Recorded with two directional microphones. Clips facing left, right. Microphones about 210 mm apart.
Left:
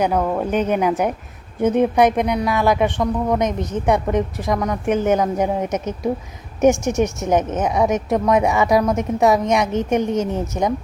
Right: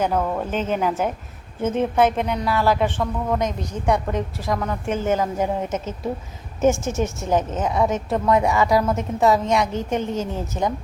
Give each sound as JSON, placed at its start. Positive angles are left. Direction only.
{"t": 0.0, "sound": "a woman's voice", "side_deg": 15}